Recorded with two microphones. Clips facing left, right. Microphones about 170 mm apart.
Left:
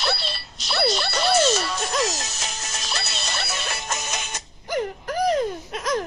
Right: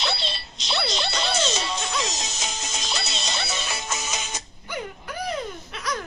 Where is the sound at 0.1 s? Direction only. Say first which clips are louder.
Left 2 dB; 20° right (ahead or behind).